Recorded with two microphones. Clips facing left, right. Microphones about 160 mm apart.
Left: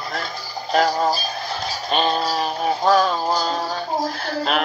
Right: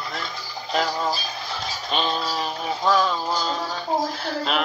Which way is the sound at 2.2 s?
40° left (ahead or behind).